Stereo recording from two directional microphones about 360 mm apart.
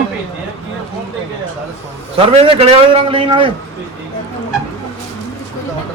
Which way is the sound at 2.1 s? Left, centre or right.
Centre.